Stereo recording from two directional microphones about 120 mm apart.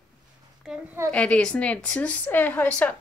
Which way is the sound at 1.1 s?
10° left (ahead or behind).